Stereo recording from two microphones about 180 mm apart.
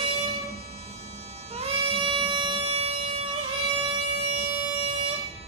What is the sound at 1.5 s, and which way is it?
Music, 35° right (ahead or behind).